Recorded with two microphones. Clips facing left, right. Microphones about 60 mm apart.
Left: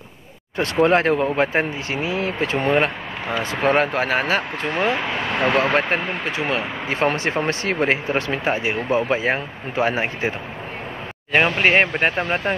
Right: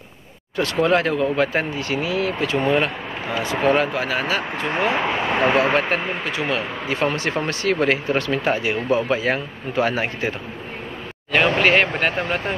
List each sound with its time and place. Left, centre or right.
0.8 s speech: left
4.9 s speech: right
5.8 s speech: left
11.6 s speech: left